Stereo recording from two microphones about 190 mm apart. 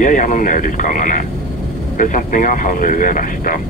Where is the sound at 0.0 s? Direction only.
45° left (ahead or behind).